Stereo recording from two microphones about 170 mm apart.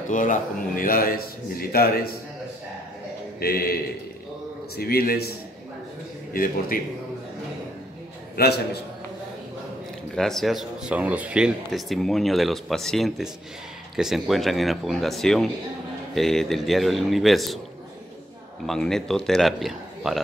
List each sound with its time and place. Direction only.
0.1 s a man's voice: 50° left (ahead or behind)
3.3 s a man's voice: 65° left (ahead or behind)
6.3 s a man's voice: 55° left (ahead or behind)
8.4 s a man's voice: 65° left (ahead or behind)
10.1 s speech: centre (ahead or behind)
18.7 s speech: 5° left (ahead or behind)